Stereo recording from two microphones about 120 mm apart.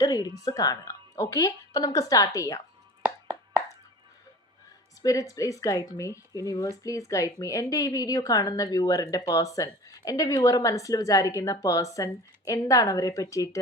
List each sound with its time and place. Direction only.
0.0 s speech: 30° left (ahead or behind)
3.0 s plop: 15° right (ahead or behind)
5.3 s speech: 30° left (ahead or behind)